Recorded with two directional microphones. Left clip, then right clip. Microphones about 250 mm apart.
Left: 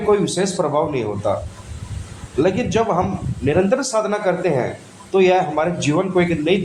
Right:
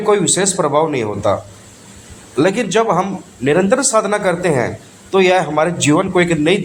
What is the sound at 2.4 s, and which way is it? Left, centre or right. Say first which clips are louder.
Speech: right 4 dB; right.